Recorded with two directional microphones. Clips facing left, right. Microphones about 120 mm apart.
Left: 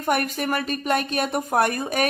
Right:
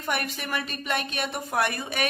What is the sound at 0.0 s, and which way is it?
Speech, 45° left (ahead or behind).